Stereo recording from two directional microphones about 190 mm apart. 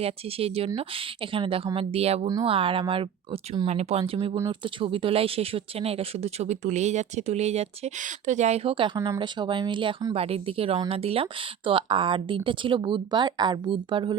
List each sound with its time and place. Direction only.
0.0 s speech: 30° right (ahead or behind)
4.4 s speech: 15° right (ahead or behind)
4.8 s speech: 30° right (ahead or behind)